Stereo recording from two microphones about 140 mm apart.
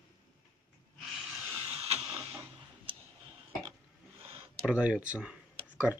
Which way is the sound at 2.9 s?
35° right (ahead or behind).